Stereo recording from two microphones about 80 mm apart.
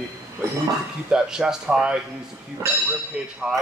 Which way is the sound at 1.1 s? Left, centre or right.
Centre.